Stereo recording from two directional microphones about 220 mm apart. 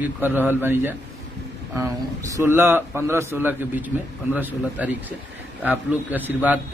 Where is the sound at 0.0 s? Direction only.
10° right (ahead or behind).